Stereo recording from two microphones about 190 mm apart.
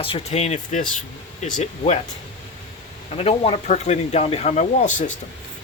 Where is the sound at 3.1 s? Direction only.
30° left (ahead or behind).